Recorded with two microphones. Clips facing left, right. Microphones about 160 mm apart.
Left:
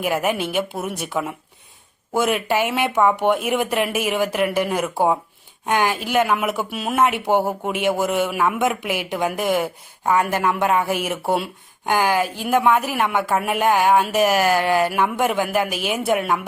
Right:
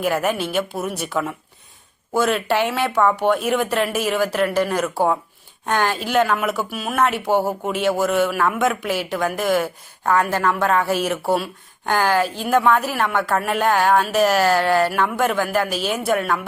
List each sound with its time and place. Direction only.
0.0 s speech: 15° left (ahead or behind)